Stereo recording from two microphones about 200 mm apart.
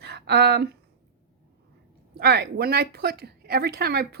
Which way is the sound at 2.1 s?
55° right (ahead or behind).